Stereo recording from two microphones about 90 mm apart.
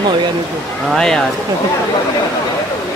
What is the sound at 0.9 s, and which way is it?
Speech, 5° left (ahead or behind).